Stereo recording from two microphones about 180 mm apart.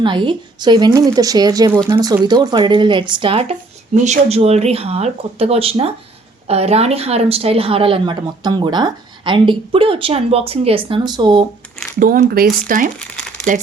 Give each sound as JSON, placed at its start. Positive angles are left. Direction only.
{"t": 0.0, "sound": "a woman's voice", "side_deg": -25}
{"t": 11.9, "sound": "speech", "side_deg": -50}
{"t": 13.0, "sound": "crumpling", "side_deg": 5}